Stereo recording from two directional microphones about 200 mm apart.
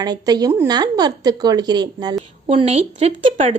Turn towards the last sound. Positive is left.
turn(degrees=-30)  # may be behind; listen again after turning